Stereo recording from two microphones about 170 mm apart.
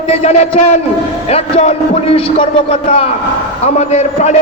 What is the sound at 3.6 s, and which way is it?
Speech, 40° left (ahead or behind).